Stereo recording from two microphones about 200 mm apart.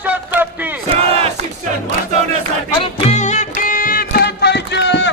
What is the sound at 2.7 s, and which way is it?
Music, 35° left (ahead or behind).